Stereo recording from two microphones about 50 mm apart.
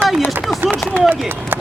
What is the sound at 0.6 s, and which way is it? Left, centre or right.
Speech, right.